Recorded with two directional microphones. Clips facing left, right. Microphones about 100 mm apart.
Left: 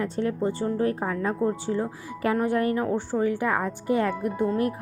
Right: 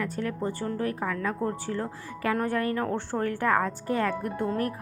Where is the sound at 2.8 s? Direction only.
10° left (ahead or behind).